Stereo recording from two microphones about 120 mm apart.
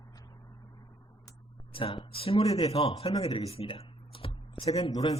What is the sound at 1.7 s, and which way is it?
Speech, 50° left (ahead or behind).